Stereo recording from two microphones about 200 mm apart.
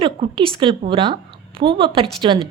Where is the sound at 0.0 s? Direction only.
25° right (ahead or behind).